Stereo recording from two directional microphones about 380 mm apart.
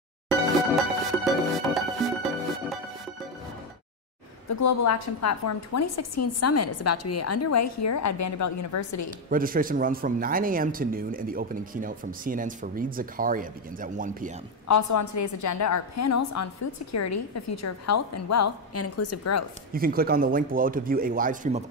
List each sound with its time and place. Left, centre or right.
0.3 s music: centre
4.5 s a woman's voice: left
9.3 s speech: right
14.7 s a woman's voice: left
19.7 s speech: right